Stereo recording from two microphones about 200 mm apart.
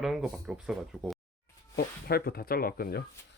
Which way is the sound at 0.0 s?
Centre (ahead or behind).